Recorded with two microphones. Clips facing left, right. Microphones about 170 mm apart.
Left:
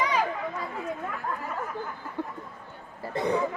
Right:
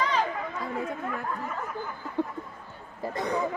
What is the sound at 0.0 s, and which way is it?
Chatter, 10° left (ahead or behind).